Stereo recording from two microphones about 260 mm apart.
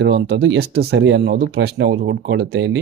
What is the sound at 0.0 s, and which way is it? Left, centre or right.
Speech, right.